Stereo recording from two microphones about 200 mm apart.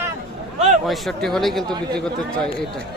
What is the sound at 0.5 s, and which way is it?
Speech, 35° right (ahead or behind).